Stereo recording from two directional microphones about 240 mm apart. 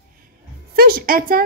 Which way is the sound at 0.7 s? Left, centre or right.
Right.